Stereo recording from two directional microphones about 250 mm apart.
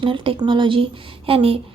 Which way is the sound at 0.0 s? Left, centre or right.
Centre.